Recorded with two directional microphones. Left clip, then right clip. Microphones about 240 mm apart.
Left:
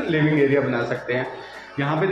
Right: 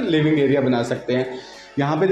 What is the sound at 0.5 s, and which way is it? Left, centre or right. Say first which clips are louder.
Speech: right 2 dB; right.